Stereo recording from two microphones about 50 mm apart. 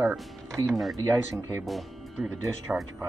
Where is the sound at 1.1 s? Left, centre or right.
Right.